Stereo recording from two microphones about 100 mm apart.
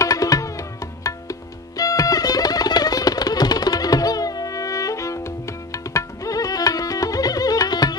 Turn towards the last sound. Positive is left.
turn(degrees=40)  # may be behind; listen again after turning